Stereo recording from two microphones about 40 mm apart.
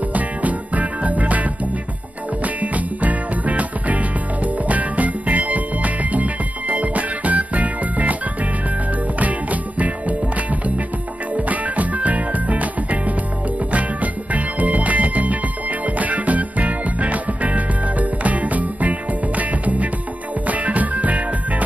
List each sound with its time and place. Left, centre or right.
0.1 s music: right
9.2 s music: right